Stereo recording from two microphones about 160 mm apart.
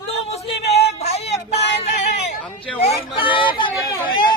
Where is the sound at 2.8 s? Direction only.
30° left (ahead or behind).